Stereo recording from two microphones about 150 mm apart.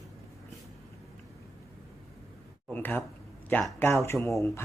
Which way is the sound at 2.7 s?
10° left (ahead or behind).